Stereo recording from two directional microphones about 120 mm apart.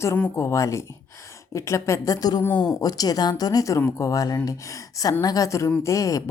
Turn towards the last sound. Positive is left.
turn(degrees=25)  # may be behind; listen again after turning